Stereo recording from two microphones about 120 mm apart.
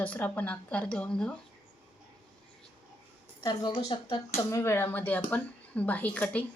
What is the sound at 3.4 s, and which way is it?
Speech, 40° left (ahead or behind).